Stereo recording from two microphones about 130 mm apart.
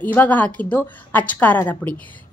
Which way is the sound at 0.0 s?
10° left (ahead or behind).